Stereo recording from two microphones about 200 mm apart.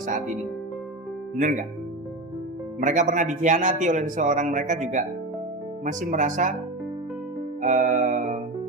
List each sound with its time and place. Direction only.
1.4 s a man's voice: 40° right (ahead or behind)
2.8 s a man's voice: 40° right (ahead or behind)
7.6 s music: 40° right (ahead or behind)